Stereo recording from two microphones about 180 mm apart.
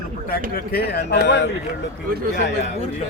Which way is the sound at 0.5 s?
60° left (ahead or behind).